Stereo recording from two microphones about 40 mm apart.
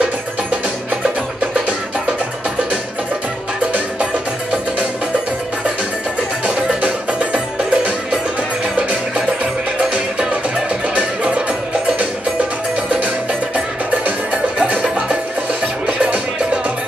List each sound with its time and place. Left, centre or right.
1.4 s music: right
4.0 s music: right
6.8 s music: right
14.6 s music: right